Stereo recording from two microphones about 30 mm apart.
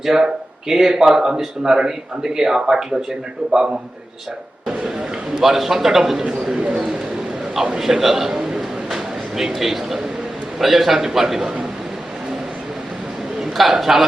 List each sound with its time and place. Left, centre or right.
0.0 s speech: centre
4.7 s a sound: right
5.4 s speech: centre
7.6 s a sound: centre
9.6 s speech: centre
13.4 s a man's voice: centre